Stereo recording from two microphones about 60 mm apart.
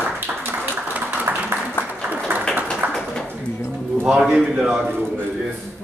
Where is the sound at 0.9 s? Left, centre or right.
Right.